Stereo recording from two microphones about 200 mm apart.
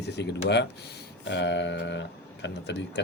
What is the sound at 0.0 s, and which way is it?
Speech, 60° left (ahead or behind).